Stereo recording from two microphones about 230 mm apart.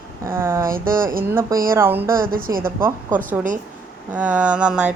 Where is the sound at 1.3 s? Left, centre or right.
Centre.